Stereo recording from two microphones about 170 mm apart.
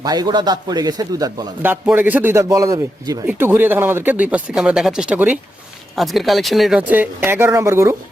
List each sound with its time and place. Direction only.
0.0 s speech: 25° right (ahead or behind)
1.6 s speech: 10° right (ahead or behind)